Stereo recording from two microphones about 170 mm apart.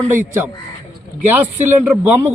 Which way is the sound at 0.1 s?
15° right (ahead or behind).